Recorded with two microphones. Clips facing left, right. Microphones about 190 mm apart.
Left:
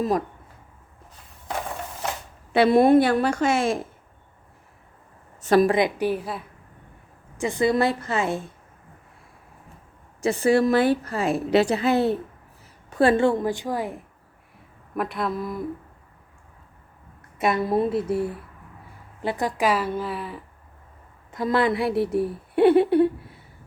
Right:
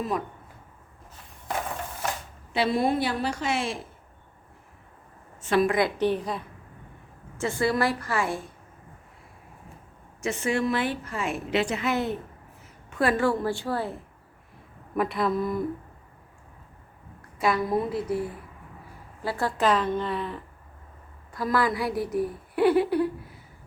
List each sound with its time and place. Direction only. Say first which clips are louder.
2.5 s a woman's voice: left 8 dB; 55° left (ahead or behind)
5.4 s a woman's voice: left 5 dB; 40° left (ahead or behind)
6.0 s a woman's voice: even; 5° left (ahead or behind)
7.3 s a woman's voice: left 4 dB; 15° left (ahead or behind)
10.2 s a woman's voice: left 7 dB; 35° left (ahead or behind); by 14.0 s 15° left (ahead or behind)
14.9 s speech: right 2 dB; centre (ahead or behind)
17.4 s a woman's voice: left 3 dB; 25° left (ahead or behind)
19.2 s a woman's voice: left 2 dB; 20° left (ahead or behind)
21.3 s a woman's voice: left 4 dB; 25° left (ahead or behind)